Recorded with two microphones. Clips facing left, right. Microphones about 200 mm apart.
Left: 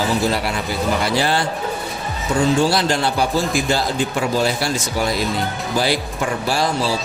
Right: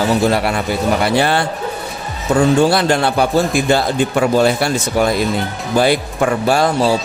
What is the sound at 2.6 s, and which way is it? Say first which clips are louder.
Speech: right 4 dB; 55° right (ahead or behind).